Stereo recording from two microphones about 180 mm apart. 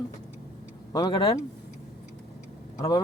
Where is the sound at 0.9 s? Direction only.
25° left (ahead or behind).